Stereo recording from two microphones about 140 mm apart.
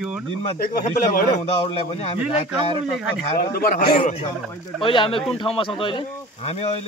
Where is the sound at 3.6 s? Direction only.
90° left.